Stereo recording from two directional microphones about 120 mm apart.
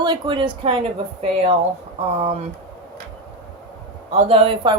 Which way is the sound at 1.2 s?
55° right (ahead or behind).